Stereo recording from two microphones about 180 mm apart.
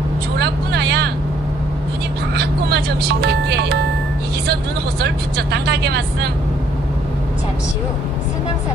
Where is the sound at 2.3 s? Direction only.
65° right (ahead or behind).